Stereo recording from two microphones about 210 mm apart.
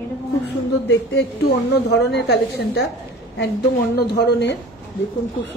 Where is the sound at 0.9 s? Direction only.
55° left (ahead or behind).